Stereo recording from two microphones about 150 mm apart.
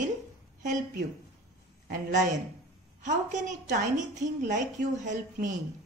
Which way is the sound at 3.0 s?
55° right (ahead or behind).